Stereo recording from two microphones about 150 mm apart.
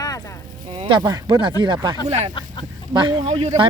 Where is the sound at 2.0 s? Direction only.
50° right (ahead or behind).